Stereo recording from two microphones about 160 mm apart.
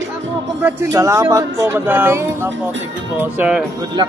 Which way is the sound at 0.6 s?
20° right (ahead or behind).